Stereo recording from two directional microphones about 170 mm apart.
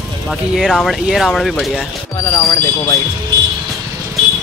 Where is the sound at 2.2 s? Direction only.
20° left (ahead or behind).